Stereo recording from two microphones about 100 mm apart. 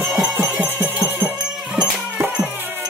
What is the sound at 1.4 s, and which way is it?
Music, 5° right (ahead or behind).